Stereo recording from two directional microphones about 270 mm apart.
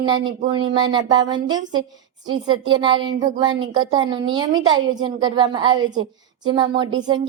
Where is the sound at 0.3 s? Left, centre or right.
Right.